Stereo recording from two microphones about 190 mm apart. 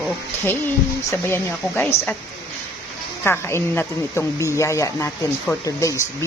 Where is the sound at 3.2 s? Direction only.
10° left (ahead or behind).